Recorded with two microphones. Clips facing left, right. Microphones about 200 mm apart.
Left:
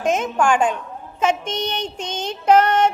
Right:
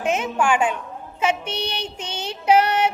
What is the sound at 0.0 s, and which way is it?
Female singing, 10° right (ahead or behind).